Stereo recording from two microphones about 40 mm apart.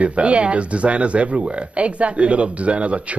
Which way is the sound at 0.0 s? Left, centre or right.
Right.